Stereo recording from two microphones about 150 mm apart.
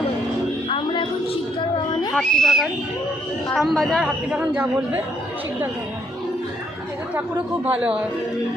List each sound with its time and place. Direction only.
0.7 s a sound: 35° left (ahead or behind)
2.1 s a woman's voice: centre (ahead or behind)
7.1 s speech: 10° right (ahead or behind)